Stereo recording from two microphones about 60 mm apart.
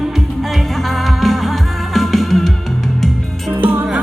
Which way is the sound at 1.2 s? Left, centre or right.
Centre.